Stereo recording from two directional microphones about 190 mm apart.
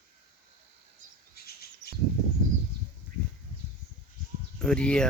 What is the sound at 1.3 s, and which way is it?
Bird vocalization, 55° left (ahead or behind).